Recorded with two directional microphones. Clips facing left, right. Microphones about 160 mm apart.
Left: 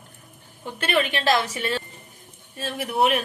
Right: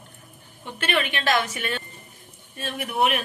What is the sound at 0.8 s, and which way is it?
A woman's voice, 35° left (ahead or behind).